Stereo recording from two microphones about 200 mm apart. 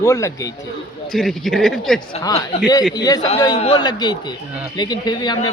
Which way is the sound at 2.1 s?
20° left (ahead or behind).